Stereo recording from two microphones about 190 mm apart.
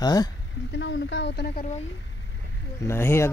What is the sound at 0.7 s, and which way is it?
Speech, 70° left (ahead or behind).